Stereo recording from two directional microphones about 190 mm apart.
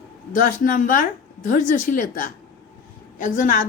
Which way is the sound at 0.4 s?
45° left (ahead or behind).